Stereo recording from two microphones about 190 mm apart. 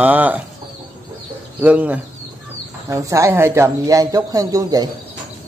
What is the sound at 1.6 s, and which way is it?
Speech, 5° right (ahead or behind).